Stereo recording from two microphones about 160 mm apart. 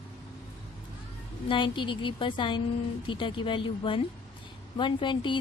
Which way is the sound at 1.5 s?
30° left (ahead or behind).